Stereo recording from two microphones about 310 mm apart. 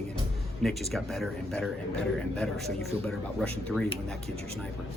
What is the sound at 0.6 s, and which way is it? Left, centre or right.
Speech, centre.